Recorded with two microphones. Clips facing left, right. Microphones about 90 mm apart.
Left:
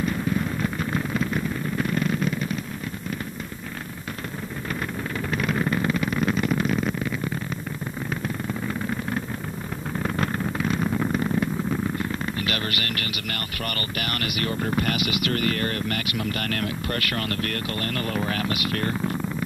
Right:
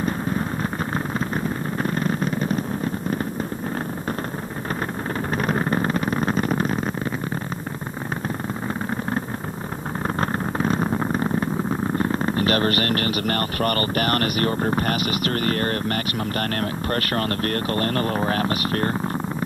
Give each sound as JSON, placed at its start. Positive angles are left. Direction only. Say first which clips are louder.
{"t": 0.0, "sound": "a sound", "louder": "right 1 dB", "side_deg": -35}
{"t": 5.3, "sound": "vehicle", "louder": "right 2 dB", "side_deg": -40}
{"t": 10.0, "sound": "purr", "louder": "right 2 dB", "side_deg": -35}